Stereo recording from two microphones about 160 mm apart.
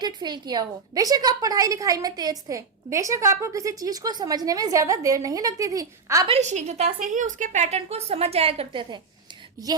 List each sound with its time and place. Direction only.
0.0 s a woman's voice: 25° right (ahead or behind)
6.2 s a woman's voice: 40° right (ahead or behind)